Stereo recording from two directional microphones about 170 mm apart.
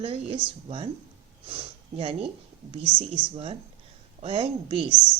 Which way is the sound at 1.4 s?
35° right (ahead or behind).